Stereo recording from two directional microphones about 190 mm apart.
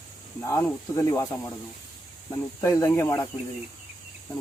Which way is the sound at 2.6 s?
15° left (ahead or behind).